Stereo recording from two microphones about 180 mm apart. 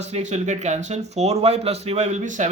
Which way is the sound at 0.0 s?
40° right (ahead or behind).